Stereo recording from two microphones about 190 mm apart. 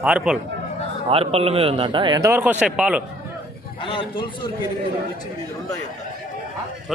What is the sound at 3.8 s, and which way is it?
Speech, 25° left (ahead or behind).